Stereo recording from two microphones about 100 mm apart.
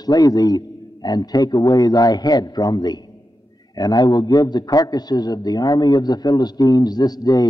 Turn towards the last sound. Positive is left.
turn(degrees=40)  # may be behind; listen again after turning